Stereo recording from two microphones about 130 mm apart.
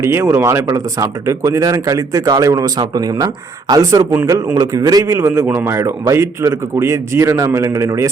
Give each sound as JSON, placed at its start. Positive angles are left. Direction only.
{"t": 0.0, "sound": "speech", "side_deg": -20}